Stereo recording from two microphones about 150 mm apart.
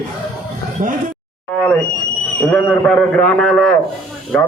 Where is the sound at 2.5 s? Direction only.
10° left (ahead or behind).